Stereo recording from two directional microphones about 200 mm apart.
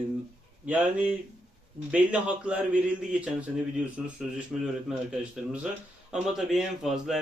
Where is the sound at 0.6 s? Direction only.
5° right (ahead or behind).